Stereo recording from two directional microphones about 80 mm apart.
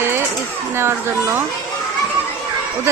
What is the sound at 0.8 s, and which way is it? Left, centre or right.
Speech, right.